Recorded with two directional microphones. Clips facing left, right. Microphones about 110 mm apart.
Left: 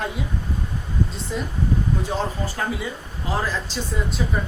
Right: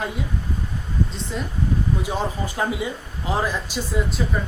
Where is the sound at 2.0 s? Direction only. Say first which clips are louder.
Even; 15° right (ahead or behind).